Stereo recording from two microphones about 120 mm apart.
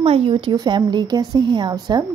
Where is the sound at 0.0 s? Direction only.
50° right (ahead or behind).